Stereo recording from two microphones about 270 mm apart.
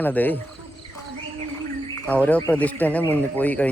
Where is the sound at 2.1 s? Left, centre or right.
Centre.